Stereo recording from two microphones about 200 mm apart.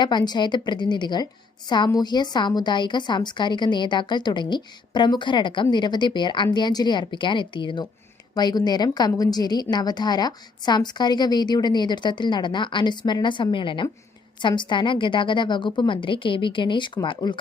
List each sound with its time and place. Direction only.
0.0 s a woman's voice: 20° left (ahead or behind)